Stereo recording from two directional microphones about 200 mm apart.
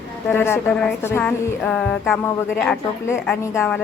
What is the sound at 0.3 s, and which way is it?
A woman's voice, 10° left (ahead or behind).